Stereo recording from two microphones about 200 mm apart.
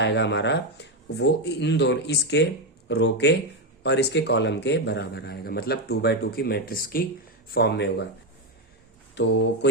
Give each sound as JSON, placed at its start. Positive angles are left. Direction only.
{"t": 0.0, "sound": "speech", "side_deg": 60}
{"t": 9.1, "sound": "speech", "side_deg": 60}